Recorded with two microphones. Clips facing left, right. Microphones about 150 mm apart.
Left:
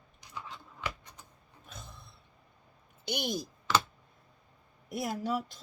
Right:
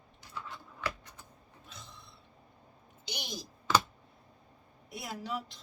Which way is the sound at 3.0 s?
50° left (ahead or behind).